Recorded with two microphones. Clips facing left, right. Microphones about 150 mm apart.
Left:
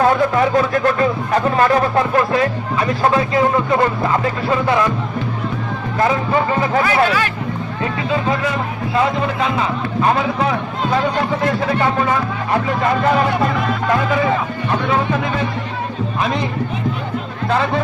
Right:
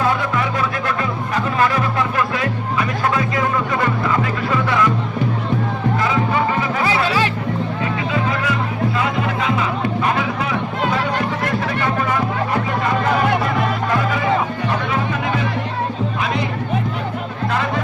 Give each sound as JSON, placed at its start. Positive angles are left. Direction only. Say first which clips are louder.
{"t": 0.0, "sound": "speech", "louder": "left 5 dB", "side_deg": 40}
{"t": 6.0, "sound": "speech", "louder": "left 5 dB", "side_deg": 40}
{"t": 10.0, "sound": "speech", "louder": "left 8 dB", "side_deg": 35}